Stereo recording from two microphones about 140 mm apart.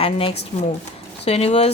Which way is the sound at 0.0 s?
40° left (ahead or behind).